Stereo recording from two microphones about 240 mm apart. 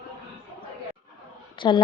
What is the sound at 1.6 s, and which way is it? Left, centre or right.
Speech, centre.